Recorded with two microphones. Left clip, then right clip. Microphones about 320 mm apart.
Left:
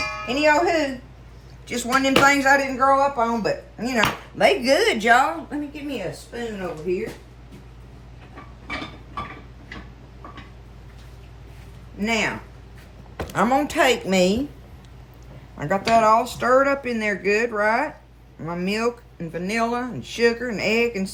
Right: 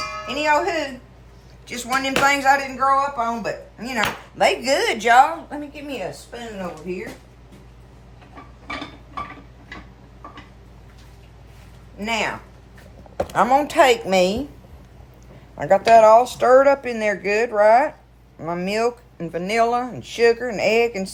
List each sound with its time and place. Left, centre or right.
0.0 s speech: centre
11.9 s a woman's voice: centre
15.5 s speech: right